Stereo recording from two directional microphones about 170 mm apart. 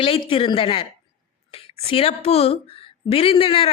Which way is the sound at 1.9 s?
35° left (ahead or behind).